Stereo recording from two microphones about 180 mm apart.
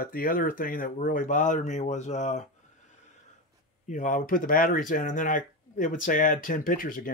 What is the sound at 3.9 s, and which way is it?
Speech, 45° left (ahead or behind).